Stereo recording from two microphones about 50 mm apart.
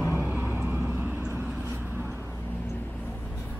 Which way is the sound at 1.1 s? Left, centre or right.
Right.